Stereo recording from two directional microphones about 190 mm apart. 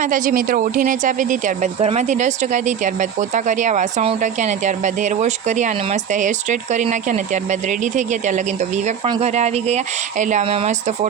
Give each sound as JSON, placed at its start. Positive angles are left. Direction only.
{"t": 0.0, "sound": "speech", "side_deg": -45}